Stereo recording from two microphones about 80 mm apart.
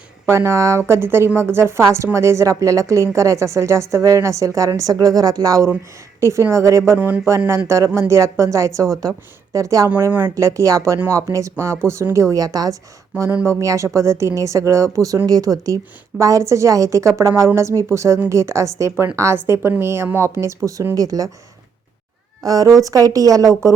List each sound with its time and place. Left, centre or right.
0.3 s a woman's voice: right
10.1 s speech: right
10.3 s a woman's voice: right
13.4 s a woman's voice: right
22.4 s a woman's voice: right